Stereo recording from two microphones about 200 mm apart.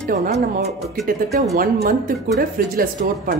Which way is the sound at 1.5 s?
45° right (ahead or behind).